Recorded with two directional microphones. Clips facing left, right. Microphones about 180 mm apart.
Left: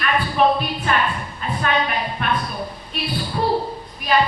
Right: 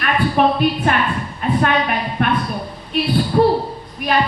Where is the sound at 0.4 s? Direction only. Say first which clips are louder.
Right 1 dB; 55° right (ahead or behind).